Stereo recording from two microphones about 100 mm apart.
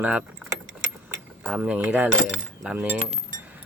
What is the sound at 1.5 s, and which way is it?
Speech, 15° right (ahead or behind).